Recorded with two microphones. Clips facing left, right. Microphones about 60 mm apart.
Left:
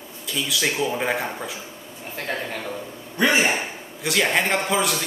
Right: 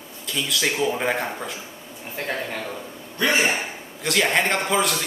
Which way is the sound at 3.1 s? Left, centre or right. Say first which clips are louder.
Left 1 dB; left.